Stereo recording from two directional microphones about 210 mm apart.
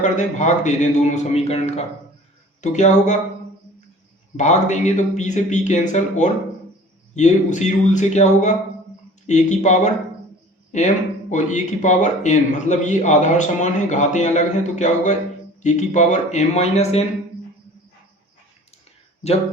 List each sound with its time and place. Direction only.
0.0 s speech: 35° left (ahead or behind)
4.4 s speech: 35° left (ahead or behind)